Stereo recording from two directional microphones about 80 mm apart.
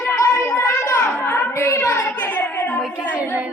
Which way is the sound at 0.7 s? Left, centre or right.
Left.